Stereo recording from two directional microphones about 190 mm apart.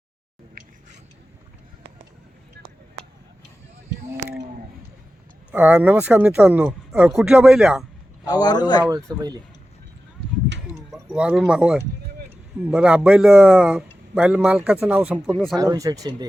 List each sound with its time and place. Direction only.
5.5 s speech: 10° right (ahead or behind)
8.3 s a man's voice: 20° left (ahead or behind)
8.8 s speech: 15° right (ahead or behind)
11.1 s a man's voice: 5° right (ahead or behind)
15.5 s speech: 20° right (ahead or behind)